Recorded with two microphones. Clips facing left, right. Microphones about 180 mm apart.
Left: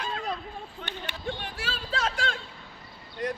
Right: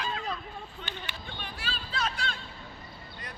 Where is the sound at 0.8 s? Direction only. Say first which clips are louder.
Left 6 dB; 75° left (ahead or behind).